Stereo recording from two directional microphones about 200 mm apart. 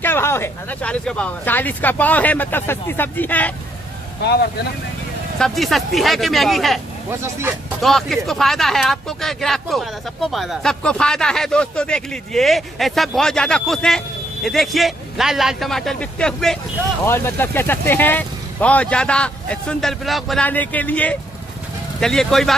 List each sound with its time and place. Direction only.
0.0 s speech: 10° left (ahead or behind)
4.2 s speech: 55° left (ahead or behind)
5.4 s speech: centre (ahead or behind)
7.1 s speech: 15° right (ahead or behind)
7.8 s speech: centre (ahead or behind)